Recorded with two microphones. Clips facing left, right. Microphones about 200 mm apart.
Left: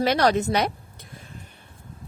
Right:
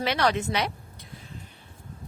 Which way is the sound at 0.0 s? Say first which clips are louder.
Left 5 dB; 40° left (ahead or behind).